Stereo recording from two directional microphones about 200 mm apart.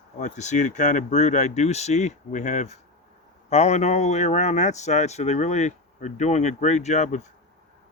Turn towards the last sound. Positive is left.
turn(degrees=35)  # may be behind; listen again after turning